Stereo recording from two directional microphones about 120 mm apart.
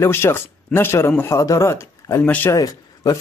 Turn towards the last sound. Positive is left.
turn(degrees=30)  # may be behind; listen again after turning